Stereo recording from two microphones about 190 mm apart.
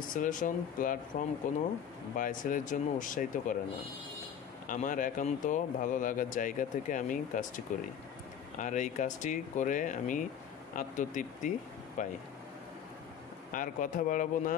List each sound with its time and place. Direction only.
0.1 s speech: 45° left (ahead or behind)
4.6 s speech: 45° left (ahead or behind)
13.5 s speech: 45° left (ahead or behind)